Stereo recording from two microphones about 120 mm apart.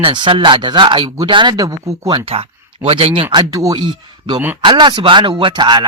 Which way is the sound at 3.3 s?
30° right (ahead or behind).